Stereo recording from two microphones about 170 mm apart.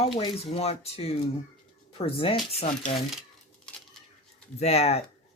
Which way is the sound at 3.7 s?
5° left (ahead or behind).